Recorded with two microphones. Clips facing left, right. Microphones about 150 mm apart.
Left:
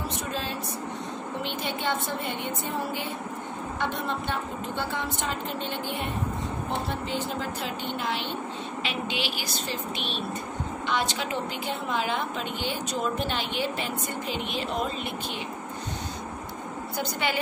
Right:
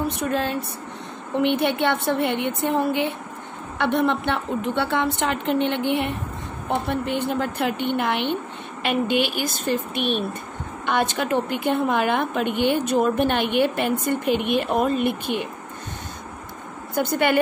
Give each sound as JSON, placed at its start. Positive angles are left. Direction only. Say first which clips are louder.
{"t": 0.0, "sound": "a woman's voice", "louder": "right 8 dB", "side_deg": -60}
{"t": 16.9, "sound": "a woman's voice", "louder": "right 10 dB", "side_deg": -55}